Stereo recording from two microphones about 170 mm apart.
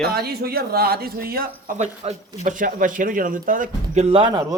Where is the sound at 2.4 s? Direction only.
50° right (ahead or behind).